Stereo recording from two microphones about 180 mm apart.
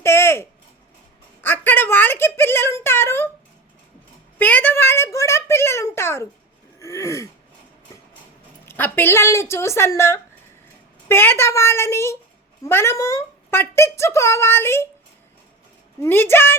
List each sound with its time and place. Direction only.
0.0 s a sound: 15° left (ahead or behind)
1.4 s speech: 10° left (ahead or behind)
4.4 s speech: 10° left (ahead or behind)
6.7 s gasp: 15° left (ahead or behind)
8.6 s speech: 10° left (ahead or behind)
16.0 s speech: 10° left (ahead or behind)